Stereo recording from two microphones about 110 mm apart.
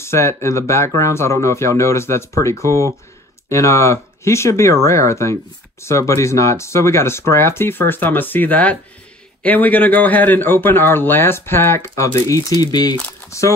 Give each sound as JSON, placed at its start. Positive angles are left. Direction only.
{"t": 0.0, "sound": "speech", "side_deg": 25}